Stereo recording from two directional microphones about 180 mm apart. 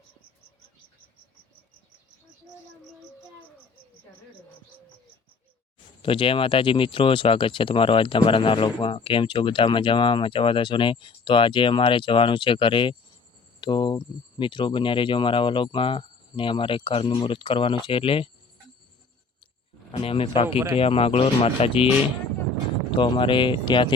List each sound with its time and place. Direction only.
6.0 s speech: 30° left (ahead or behind)
19.9 s speech: 30° left (ahead or behind)
23.0 s speech: 25° left (ahead or behind)